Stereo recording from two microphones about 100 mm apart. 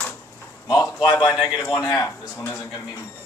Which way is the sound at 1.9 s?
25° left (ahead or behind).